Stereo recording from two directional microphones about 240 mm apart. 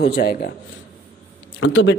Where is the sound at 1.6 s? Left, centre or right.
Left.